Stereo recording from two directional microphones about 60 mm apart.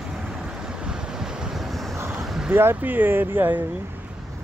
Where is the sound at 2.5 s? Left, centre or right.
Right.